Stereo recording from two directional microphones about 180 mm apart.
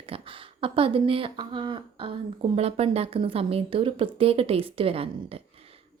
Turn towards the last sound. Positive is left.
turn(degrees=-30)  # may be behind; listen again after turning